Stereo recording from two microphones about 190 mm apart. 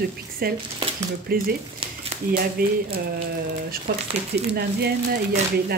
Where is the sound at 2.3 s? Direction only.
50° right (ahead or behind).